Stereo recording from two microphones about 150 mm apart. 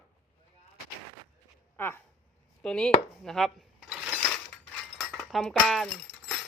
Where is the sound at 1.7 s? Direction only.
15° left (ahead or behind).